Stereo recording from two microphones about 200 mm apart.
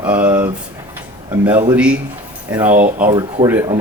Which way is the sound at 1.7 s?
5° right (ahead or behind).